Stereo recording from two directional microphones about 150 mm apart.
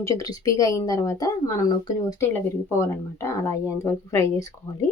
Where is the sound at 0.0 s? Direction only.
20° left (ahead or behind).